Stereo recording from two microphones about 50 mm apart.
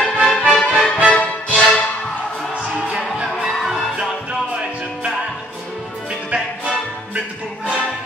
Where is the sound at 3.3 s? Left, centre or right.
Centre.